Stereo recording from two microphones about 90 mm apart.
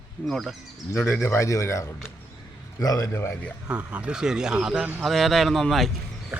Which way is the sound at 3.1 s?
25° left (ahead or behind).